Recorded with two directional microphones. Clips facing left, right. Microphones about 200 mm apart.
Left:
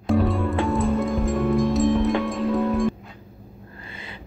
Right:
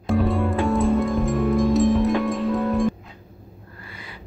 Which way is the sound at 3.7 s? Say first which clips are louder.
Left 1 dB; 25° left (ahead or behind).